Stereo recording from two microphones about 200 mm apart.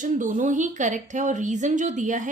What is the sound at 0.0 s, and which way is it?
Speech, 40° right (ahead or behind).